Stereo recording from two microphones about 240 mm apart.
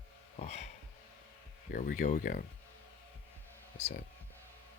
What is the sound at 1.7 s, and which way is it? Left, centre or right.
Speech, left.